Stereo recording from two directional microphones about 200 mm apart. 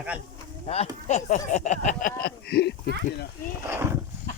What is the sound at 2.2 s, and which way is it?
Speech, 55° left (ahead or behind).